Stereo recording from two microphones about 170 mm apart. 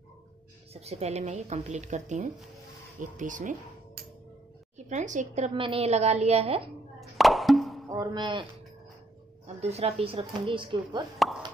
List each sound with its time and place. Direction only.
0.7 s speech: 35° right (ahead or behind)
5.5 s speech: 30° right (ahead or behind)
7.0 s plop: centre (ahead or behind)
7.9 s speech: 25° right (ahead or behind)
9.6 s speech: 40° right (ahead or behind)